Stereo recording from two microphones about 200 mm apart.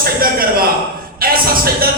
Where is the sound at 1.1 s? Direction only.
45° right (ahead or behind).